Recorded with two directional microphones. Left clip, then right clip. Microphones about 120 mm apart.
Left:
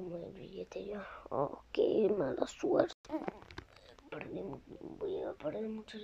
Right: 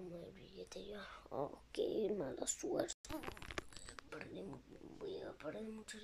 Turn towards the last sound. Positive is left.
turn(degrees=20)  # may be behind; listen again after turning